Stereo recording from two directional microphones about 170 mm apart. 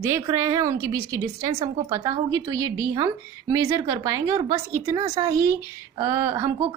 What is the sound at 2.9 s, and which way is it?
A woman's voice, 20° right (ahead or behind).